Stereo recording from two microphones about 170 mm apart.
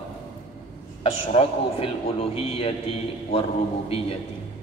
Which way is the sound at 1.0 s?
35° left (ahead or behind).